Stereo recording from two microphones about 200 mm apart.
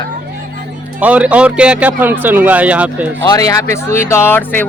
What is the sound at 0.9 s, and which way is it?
A man's voice, 5° right (ahead or behind).